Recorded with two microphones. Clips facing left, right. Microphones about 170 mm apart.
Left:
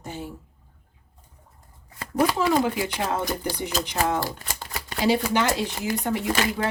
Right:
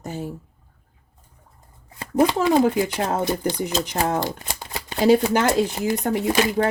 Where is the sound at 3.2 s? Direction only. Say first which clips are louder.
Right 5 dB; 20° right (ahead or behind).